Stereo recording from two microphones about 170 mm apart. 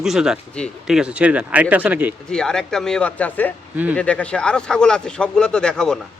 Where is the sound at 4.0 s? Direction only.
5° left (ahead or behind).